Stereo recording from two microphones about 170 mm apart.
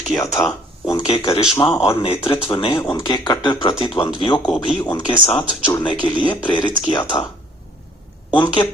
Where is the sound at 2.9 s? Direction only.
25° left (ahead or behind).